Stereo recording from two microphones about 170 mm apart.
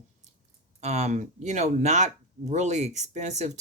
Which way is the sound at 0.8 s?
40° right (ahead or behind).